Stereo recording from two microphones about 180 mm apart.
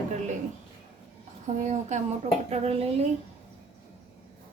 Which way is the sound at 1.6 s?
40° right (ahead or behind).